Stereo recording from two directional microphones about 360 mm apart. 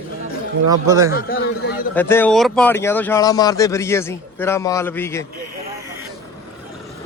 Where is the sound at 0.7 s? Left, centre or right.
Centre.